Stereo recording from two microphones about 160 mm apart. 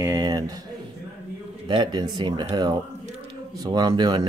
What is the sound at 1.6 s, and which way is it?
Speech, 30° right (ahead or behind).